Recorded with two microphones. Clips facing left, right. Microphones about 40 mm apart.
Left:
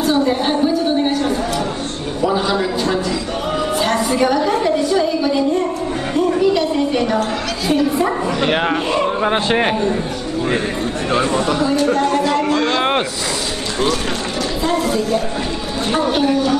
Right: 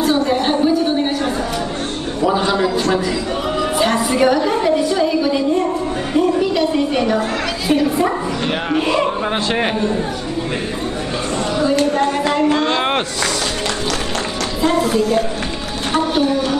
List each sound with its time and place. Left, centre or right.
0.0 s a sound: centre
3.7 s a woman's voice: centre
6.1 s a sound: centre
7.6 s speech: centre
9.2 s speech: centre
11.9 s music: centre
14.6 s speech: centre